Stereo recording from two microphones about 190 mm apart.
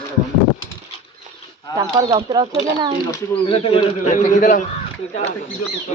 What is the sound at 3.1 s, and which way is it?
Speech, 30° left (ahead or behind).